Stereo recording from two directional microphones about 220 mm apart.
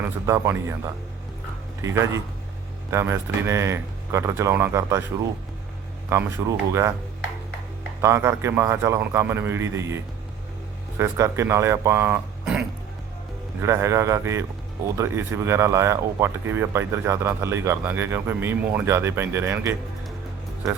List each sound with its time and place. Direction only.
0.0 s speech: 10° right (ahead or behind)
1.8 s speech: 15° right (ahead or behind)
6.1 s speech: 10° right (ahead or behind)
8.0 s speech: 15° right (ahead or behind)